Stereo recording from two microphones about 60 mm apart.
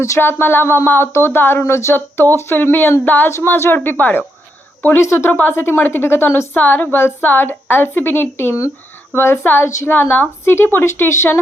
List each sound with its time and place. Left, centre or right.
0.2 s a woman's voice: left
4.9 s speech: left
5.3 s a woman's voice: left